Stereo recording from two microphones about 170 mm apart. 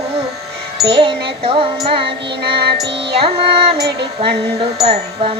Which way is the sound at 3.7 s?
75° right (ahead or behind).